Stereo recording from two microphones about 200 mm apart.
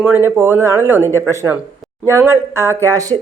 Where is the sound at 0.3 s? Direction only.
10° right (ahead or behind).